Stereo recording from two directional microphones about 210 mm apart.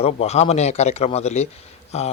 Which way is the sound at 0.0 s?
30° left (ahead or behind).